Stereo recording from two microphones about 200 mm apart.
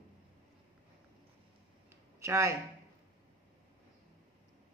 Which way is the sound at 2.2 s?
15° right (ahead or behind).